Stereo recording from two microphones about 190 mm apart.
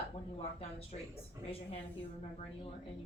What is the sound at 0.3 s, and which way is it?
Speech, 30° left (ahead or behind).